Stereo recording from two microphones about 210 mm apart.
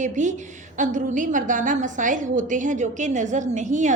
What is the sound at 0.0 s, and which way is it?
A woman's voice, 35° right (ahead or behind).